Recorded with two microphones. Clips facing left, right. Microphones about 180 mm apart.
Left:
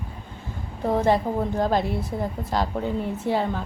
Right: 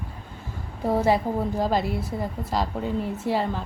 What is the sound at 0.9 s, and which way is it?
A woman's voice, 5° right (ahead or behind).